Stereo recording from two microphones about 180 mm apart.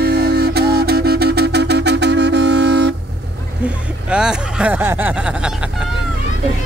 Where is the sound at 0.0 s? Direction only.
60° right (ahead or behind).